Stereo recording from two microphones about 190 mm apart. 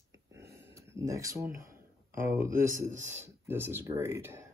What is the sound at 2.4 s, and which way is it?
Speech, 45° right (ahead or behind).